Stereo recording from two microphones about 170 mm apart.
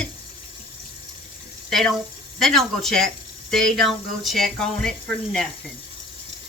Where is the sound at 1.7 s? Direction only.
Centre (ahead or behind).